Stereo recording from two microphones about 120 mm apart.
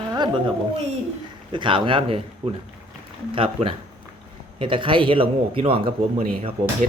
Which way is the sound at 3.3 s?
50° right (ahead or behind).